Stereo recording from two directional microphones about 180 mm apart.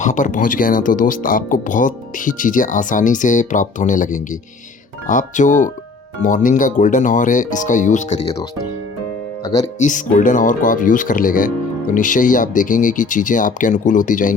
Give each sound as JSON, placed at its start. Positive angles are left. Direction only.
{"t": 0.0, "sound": "speech", "side_deg": 45}
{"t": 9.7, "sound": "speech", "side_deg": 45}